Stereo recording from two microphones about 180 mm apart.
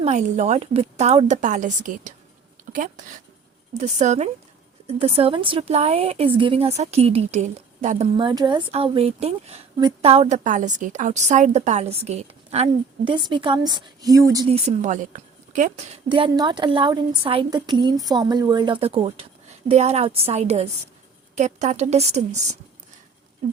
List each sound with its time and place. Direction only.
0.0 s a woman's voice: 40° right (ahead or behind)
2.7 s a sound: 45° right (ahead or behind)
3.8 s a woman's voice: 40° right (ahead or behind); by 14.4 s 20° right (ahead or behind)
14.4 s a woman's voice: 35° right (ahead or behind)